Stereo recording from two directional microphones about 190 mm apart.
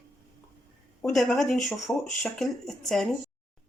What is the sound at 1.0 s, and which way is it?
Speech, centre (ahead or behind).